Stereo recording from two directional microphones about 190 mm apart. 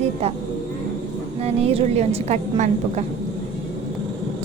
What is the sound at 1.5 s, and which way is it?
A woman's voice, 30° right (ahead or behind).